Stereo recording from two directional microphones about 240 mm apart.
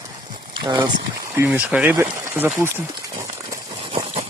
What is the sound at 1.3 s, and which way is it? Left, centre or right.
Speech, centre.